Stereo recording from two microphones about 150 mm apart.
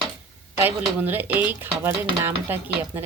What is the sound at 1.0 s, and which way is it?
Speech, 15° right (ahead or behind).